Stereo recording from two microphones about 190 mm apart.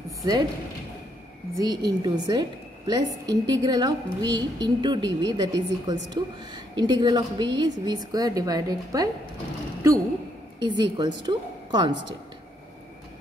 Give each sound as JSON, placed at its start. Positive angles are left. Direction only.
{"t": 0.2, "sound": "speech", "side_deg": -20}
{"t": 1.6, "sound": "a woman's voice", "side_deg": -20}
{"t": 10.6, "sound": "a woman's voice", "side_deg": -25}